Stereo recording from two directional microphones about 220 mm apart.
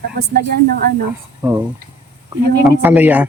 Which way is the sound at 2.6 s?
10° right (ahead or behind).